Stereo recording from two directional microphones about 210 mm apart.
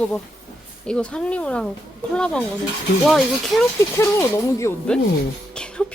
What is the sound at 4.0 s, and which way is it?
Speech, 15° left (ahead or behind).